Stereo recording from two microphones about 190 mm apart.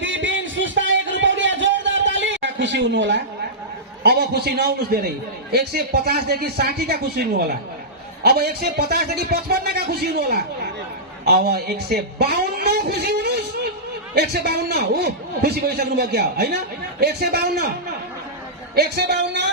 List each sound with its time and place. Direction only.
0.0 s a sound: 80° right
4.0 s a man's voice: 60° right (ahead or behind)
18.7 s a man's voice: 60° right (ahead or behind)